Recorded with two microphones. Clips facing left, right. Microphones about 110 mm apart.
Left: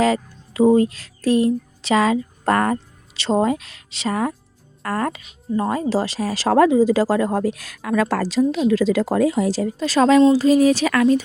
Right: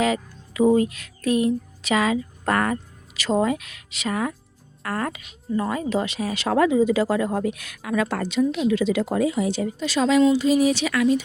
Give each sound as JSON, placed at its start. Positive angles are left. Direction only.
{"t": 0.0, "sound": "a woman's voice", "side_deg": 35}